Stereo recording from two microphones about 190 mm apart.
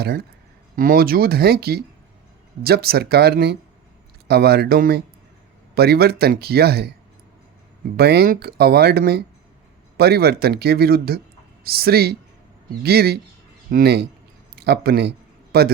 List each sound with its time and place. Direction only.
0.0 s speech: 55° right (ahead or behind)
7.9 s speech: 55° right (ahead or behind)